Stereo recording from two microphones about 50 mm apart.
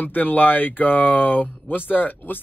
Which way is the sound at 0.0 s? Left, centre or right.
Left.